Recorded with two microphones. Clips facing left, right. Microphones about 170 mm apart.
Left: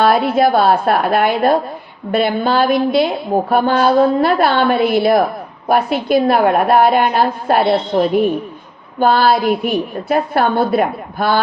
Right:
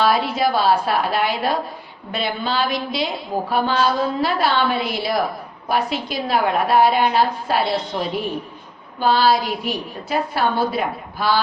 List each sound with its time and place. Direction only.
0.0 s a woman's voice: 55° left (ahead or behind)